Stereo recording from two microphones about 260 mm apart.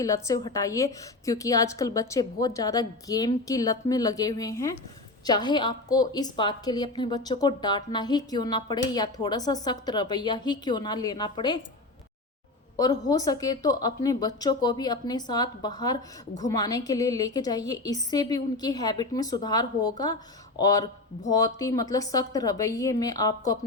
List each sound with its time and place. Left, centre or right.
0.0 s a woman's voice: centre
12.7 s a woman's voice: centre